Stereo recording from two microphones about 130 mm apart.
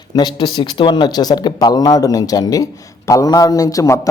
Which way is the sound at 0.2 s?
35° left (ahead or behind).